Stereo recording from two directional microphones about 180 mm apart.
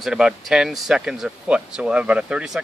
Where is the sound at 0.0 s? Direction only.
Centre (ahead or behind).